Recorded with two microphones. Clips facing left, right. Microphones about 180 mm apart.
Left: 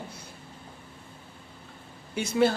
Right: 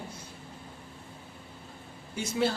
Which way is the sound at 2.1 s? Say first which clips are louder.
Left 5 dB; 60° left (ahead or behind).